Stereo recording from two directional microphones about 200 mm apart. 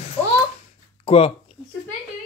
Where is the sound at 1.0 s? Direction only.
30° left (ahead or behind).